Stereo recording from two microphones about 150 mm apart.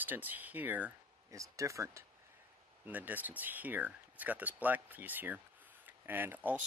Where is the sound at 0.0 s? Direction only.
10° right (ahead or behind).